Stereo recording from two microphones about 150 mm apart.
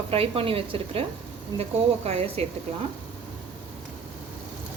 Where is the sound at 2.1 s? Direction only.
40° right (ahead or behind).